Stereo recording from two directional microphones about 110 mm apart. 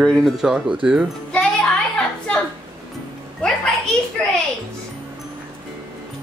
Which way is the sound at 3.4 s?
10° left (ahead or behind).